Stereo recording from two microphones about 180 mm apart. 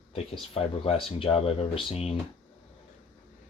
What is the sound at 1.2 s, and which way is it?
Speech, 35° left (ahead or behind).